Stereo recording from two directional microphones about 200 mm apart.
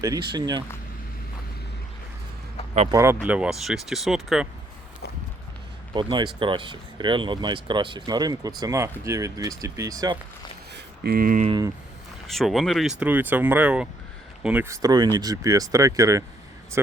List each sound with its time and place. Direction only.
0.0 s speech: 20° right (ahead or behind)
2.9 s speech: 10° right (ahead or behind)
5.9 s speech: 25° right (ahead or behind)
10.8 s a sound: 50° right (ahead or behind)
11.4 s speech: 20° right (ahead or behind)
12.3 s speech: centre (ahead or behind)